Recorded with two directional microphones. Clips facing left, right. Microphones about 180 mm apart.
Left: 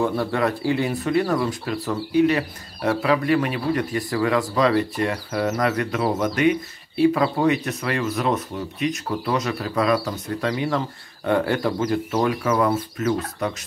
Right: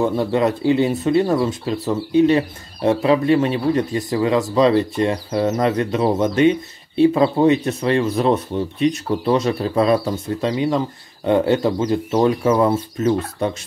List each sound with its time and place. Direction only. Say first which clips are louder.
0.0 s speech: right 4 dB; 20° right (ahead or behind)